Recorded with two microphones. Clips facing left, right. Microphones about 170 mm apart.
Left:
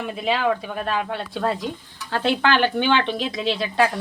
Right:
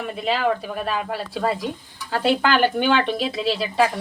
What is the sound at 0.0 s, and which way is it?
A woman's voice, centre (ahead or behind).